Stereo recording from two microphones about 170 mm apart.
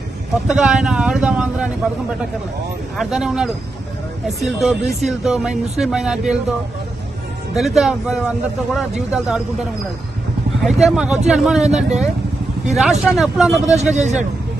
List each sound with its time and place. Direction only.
0.4 s speech: 5° right (ahead or behind)
3.0 s speech: centre (ahead or behind)
7.5 s speech: centre (ahead or behind)
10.6 s speech: centre (ahead or behind)
13.9 s a man's voice: 45° right (ahead or behind)